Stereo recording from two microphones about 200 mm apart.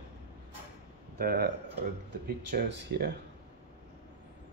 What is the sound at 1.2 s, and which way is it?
Speech, 50° right (ahead or behind).